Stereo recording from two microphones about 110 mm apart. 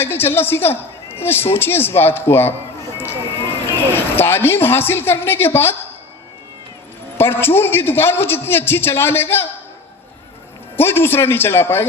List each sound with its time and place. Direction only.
0.0 s a woman's voice: 20° left (ahead or behind)
3.7 s a man's voice: 20° left (ahead or behind)
7.2 s a man's voice: 20° left (ahead or behind)
10.8 s a man's voice: 20° left (ahead or behind)